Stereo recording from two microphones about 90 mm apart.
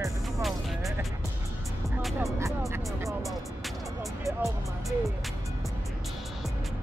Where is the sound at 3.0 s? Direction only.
Centre (ahead or behind).